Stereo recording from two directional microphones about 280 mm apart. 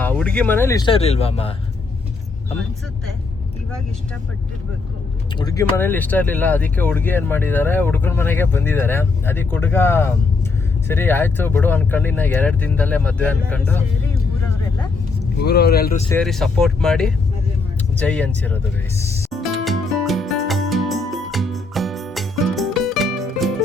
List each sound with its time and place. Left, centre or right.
0.0 s speech: centre; by 1.5 s left
5.4 s speech: centre
15.4 s speech: left
16.0 s speech: centre
19.3 s music: centre